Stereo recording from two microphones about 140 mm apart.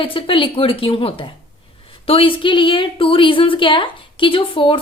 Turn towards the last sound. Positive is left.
turn(degrees=40)  # may be behind; listen again after turning